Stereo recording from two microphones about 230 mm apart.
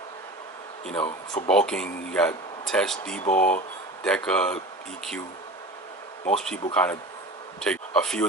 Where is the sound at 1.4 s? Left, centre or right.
Centre.